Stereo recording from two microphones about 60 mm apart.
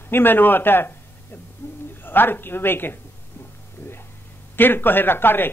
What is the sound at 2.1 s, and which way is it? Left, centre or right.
Speech, left.